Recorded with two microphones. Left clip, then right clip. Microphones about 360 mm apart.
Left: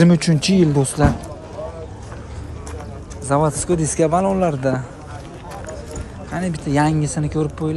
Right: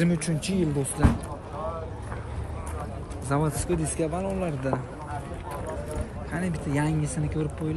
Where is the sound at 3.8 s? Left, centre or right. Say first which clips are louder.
Left 12 dB; centre.